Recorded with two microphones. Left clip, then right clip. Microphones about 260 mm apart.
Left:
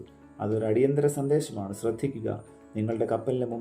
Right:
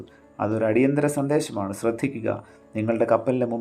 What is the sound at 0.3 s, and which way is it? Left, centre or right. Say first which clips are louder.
Speech: right 4 dB; right.